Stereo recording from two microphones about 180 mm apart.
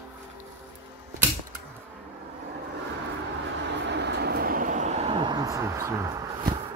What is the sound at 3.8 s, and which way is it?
Vehicle, 70° right (ahead or behind).